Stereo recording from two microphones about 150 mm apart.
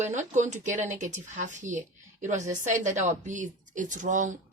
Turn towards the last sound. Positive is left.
turn(degrees=-55)  # may be behind; listen again after turning